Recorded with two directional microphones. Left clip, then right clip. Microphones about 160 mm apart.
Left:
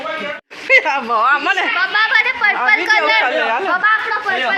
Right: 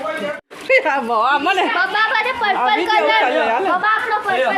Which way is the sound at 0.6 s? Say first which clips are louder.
Left 3 dB; 10° right (ahead or behind).